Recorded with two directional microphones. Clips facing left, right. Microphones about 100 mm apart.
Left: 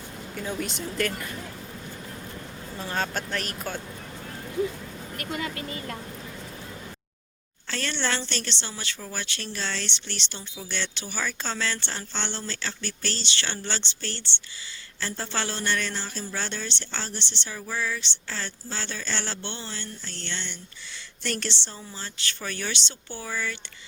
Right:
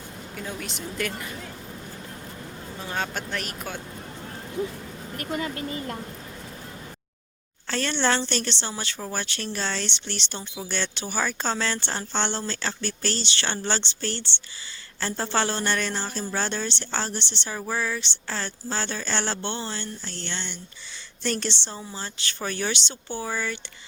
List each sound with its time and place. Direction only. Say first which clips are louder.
0.6 s speech: left 4 dB; centre (ahead or behind)
2.8 s speech: left 1 dB; 10° right (ahead or behind)
5.1 s a woman's voice: right 3 dB; 35° right (ahead or behind)
7.7 s a woman's voice: right 5 dB; 35° right (ahead or behind)